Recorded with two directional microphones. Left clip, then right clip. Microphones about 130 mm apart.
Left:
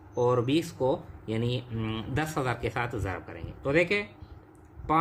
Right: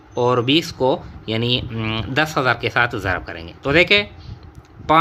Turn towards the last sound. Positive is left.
turn(degrees=-45)  # may be behind; listen again after turning